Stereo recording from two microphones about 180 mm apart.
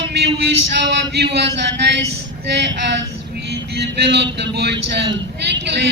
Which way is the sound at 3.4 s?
70° right (ahead or behind).